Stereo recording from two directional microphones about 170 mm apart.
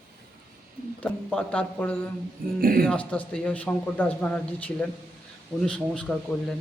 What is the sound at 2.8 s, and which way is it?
A man's voice, 5° left (ahead or behind).